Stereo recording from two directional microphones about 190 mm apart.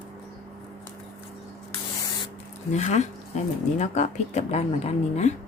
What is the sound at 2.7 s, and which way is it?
A woman's voice, 35° left (ahead or behind).